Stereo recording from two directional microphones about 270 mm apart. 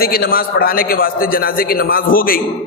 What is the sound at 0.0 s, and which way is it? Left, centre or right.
A man's voice, left.